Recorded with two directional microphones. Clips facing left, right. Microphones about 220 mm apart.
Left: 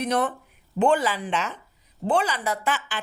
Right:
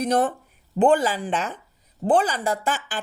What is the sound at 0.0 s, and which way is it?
Speech, 45° right (ahead or behind).